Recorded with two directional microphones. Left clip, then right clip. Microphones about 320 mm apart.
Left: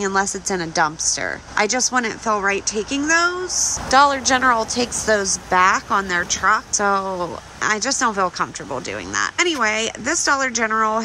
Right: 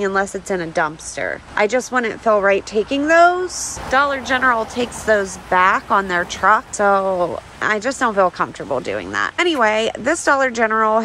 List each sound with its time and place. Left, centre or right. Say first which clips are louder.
0.0 s a woman's voice: right 1 dB; centre